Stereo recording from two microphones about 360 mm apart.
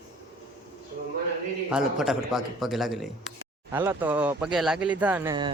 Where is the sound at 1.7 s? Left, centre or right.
Centre.